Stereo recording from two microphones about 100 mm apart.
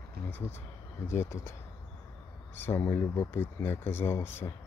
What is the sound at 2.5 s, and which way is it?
Speech, 20° left (ahead or behind).